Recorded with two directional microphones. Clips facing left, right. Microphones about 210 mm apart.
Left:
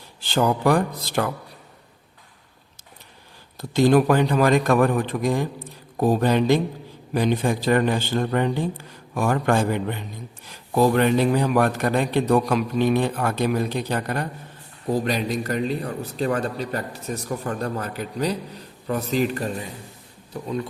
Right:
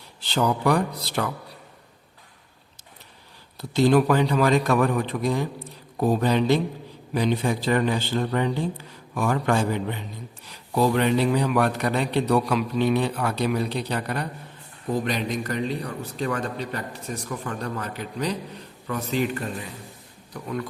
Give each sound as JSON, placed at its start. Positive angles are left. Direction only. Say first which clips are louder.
{"t": 0.3, "sound": "a man's voice", "louder": "left 2 dB", "side_deg": 50}
{"t": 3.6, "sound": "a man's voice", "louder": "left 2 dB", "side_deg": 50}
{"t": 20.3, "sound": "speech", "louder": "left 3 dB", "side_deg": 20}